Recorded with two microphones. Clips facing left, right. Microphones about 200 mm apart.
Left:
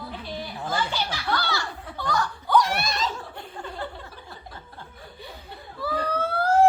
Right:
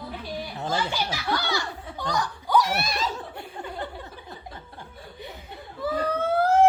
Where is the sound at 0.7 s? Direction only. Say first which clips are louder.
Even; 10° right (ahead or behind).